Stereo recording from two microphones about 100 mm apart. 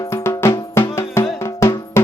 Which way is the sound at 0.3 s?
25° left (ahead or behind).